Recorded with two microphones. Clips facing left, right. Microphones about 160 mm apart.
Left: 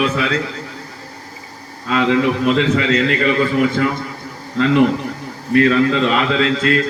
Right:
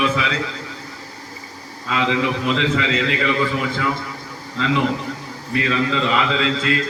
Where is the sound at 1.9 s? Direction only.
50° left (ahead or behind).